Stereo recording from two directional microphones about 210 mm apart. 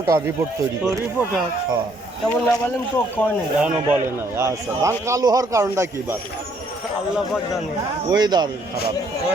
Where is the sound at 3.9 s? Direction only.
10° right (ahead or behind).